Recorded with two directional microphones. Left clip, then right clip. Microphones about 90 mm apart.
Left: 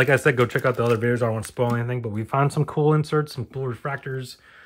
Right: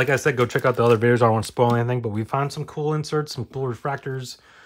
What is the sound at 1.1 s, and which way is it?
Speech, 50° right (ahead or behind).